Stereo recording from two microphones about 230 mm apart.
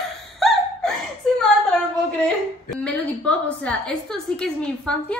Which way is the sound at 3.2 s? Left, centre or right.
Centre.